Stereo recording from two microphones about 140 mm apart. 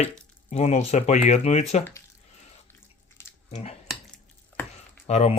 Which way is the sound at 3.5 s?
50° left (ahead or behind).